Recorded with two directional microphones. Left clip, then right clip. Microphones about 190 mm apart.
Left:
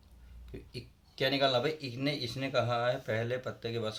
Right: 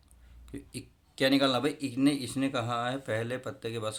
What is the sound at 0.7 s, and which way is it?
Speech, 40° right (ahead or behind).